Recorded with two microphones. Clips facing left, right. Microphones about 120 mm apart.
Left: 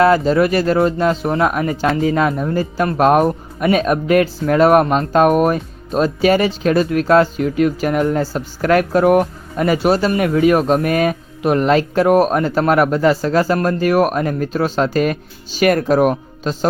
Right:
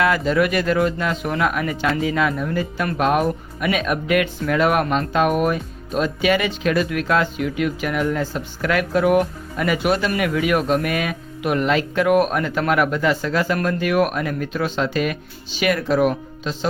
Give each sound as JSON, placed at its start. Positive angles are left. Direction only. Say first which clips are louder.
{"t": 0.0, "sound": "speech", "louder": "left 6 dB", "side_deg": 35}